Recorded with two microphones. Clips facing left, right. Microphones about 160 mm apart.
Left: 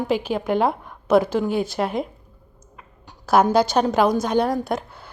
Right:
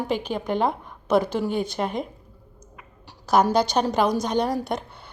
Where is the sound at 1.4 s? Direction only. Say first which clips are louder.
Left 3 dB; centre (ahead or behind).